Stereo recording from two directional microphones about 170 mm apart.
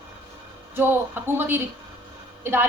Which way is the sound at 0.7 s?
15° right (ahead or behind).